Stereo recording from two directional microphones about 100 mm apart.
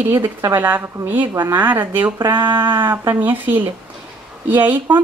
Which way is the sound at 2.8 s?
20° right (ahead or behind).